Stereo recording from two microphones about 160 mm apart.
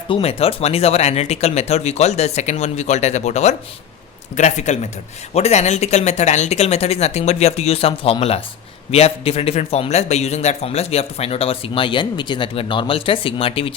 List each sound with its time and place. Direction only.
0.1 s speech: 40° left (ahead or behind)